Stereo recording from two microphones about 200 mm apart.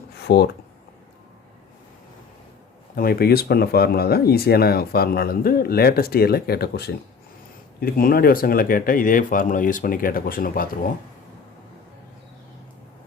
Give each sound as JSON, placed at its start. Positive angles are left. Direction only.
{"t": 0.2, "sound": "speech", "side_deg": 55}
{"t": 2.9, "sound": "speech", "side_deg": 50}